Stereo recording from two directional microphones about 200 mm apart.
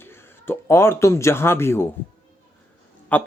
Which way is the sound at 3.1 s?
10° left (ahead or behind).